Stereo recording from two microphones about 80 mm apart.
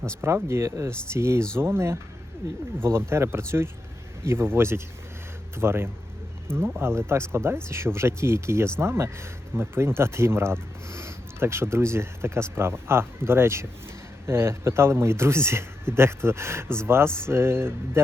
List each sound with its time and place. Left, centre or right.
0.2 s speech: right